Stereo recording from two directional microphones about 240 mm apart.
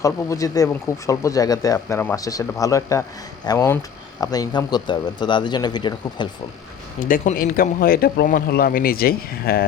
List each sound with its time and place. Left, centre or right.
0.0 s speech: centre
7.0 s a man's voice: left